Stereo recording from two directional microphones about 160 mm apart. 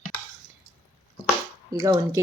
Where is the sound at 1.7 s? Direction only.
20° right (ahead or behind).